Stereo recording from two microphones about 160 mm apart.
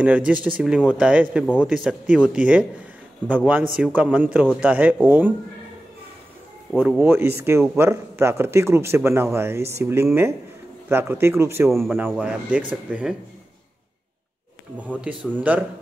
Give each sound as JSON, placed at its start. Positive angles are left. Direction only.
{"t": 0.0, "sound": "speech", "side_deg": -10}
{"t": 1.4, "sound": "speech", "side_deg": 10}
{"t": 1.7, "sound": "speech", "side_deg": -5}
{"t": 7.0, "sound": "speech", "side_deg": -15}
{"t": 14.8, "sound": "speech", "side_deg": -10}